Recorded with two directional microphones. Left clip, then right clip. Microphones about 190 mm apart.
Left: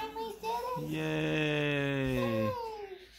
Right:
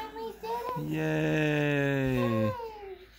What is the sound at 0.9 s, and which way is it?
Speech, 25° right (ahead or behind).